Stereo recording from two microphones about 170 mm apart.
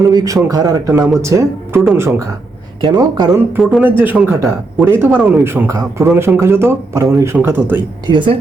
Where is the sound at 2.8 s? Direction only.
25° right (ahead or behind).